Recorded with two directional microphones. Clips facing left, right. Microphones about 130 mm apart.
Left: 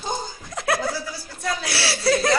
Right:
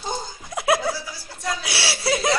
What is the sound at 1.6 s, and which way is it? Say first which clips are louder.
Speech: left 3 dB; 10° right (ahead or behind).